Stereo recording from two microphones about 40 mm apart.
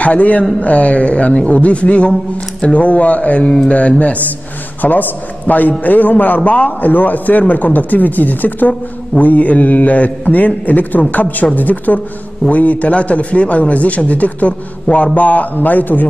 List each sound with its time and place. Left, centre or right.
0.0 s a man's voice: left
4.8 s a man's voice: left